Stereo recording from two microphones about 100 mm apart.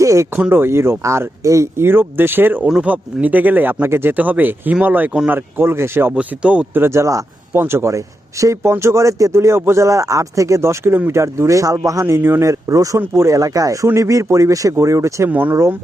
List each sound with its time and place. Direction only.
0.0 s a sound: 30° right (ahead or behind)
0.5 s speech: 25° right (ahead or behind)
6.1 s speech: 10° right (ahead or behind)
6.8 s speech: 30° right (ahead or behind)
15.3 s speech: 20° right (ahead or behind)